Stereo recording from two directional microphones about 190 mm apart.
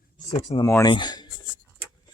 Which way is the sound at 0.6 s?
20° left (ahead or behind).